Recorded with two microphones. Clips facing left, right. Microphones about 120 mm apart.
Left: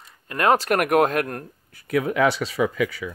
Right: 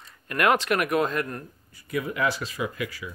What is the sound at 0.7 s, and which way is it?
Speech, 55° left (ahead or behind).